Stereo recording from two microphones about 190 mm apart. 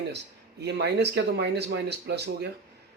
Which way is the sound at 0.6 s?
65° right (ahead or behind).